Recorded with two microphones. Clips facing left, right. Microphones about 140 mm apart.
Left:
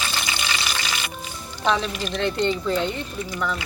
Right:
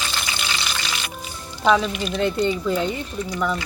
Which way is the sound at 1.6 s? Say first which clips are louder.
Right 4 dB; 5° right (ahead or behind).